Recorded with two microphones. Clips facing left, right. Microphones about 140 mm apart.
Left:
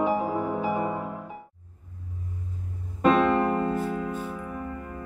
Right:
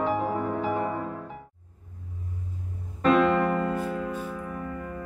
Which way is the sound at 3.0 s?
20° left (ahead or behind).